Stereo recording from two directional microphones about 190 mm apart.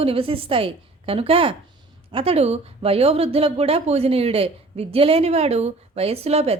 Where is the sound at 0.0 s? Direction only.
30° right (ahead or behind).